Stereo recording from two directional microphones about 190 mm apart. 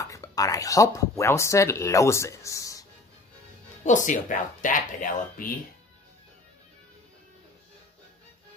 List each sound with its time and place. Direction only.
0.0 s speech: 15° left (ahead or behind)
3.8 s speech: 40° left (ahead or behind)